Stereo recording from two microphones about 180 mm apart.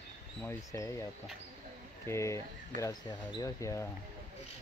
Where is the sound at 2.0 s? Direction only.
15° left (ahead or behind).